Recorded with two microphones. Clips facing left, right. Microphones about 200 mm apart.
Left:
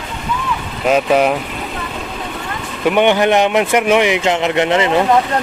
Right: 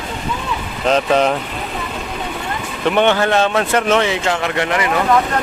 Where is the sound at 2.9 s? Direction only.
15° left (ahead or behind).